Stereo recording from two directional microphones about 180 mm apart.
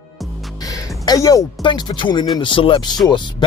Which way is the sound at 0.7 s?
20° left (ahead or behind).